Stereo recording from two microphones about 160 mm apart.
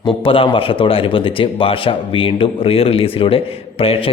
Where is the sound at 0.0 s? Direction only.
35° left (ahead or behind).